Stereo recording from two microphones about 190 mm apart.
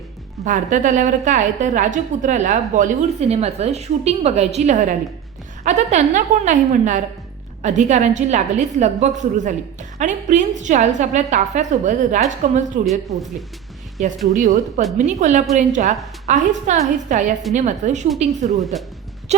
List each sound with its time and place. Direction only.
0.4 s a woman's voice: 40° right (ahead or behind)
14.3 s a woman's voice: 40° right (ahead or behind)